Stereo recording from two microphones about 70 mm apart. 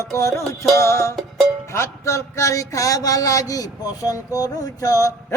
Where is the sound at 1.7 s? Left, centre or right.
Left.